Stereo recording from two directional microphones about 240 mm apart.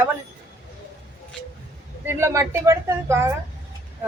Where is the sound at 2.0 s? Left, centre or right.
Centre.